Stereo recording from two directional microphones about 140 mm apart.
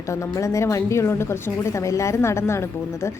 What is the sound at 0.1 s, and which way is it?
A woman's voice, 20° left (ahead or behind).